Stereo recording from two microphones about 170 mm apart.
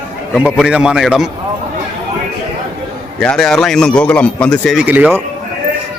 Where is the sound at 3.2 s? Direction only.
5° left (ahead or behind).